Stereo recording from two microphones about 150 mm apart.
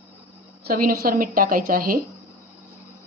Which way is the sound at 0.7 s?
80° right.